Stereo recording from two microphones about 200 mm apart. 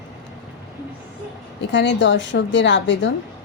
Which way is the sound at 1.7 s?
65° left (ahead or behind).